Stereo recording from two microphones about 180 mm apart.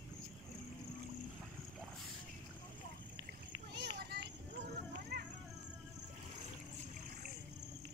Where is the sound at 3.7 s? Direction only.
65° right (ahead or behind).